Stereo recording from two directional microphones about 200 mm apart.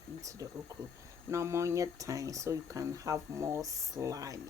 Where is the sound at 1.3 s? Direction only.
15° right (ahead or behind).